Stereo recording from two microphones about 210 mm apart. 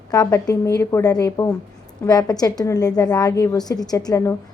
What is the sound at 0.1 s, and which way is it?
A woman's voice, 15° left (ahead or behind).